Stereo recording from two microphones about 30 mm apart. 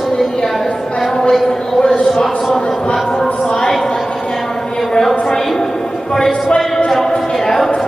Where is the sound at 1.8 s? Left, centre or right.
Left.